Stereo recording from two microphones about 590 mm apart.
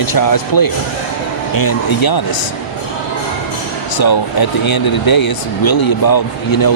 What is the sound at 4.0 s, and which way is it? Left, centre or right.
Speech, left.